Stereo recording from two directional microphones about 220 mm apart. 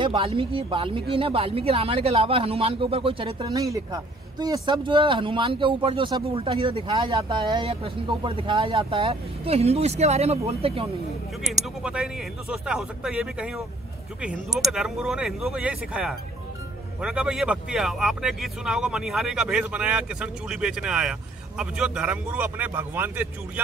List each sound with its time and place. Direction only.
0.0 s speech: 25° right (ahead or behind)
11.8 s speech: 5° right (ahead or behind)